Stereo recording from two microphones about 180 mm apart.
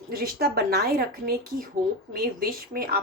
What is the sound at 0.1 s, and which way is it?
A woman's voice, 55° right (ahead or behind).